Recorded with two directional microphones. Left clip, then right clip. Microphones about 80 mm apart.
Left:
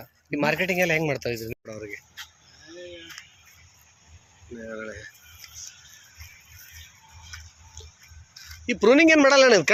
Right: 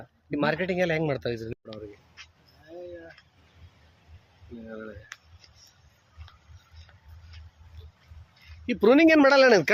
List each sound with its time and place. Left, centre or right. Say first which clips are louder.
0.0 s speech: left 2 dB; centre
4.7 s speech: left 5 dB; centre
7.8 s music: left 11 dB; right
8.6 s speech: left 2 dB; centre